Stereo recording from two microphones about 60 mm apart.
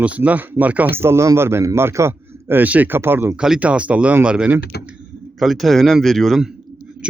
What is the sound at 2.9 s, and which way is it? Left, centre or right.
Speech, right.